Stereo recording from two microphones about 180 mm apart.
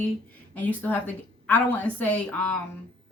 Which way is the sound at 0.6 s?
10° left (ahead or behind).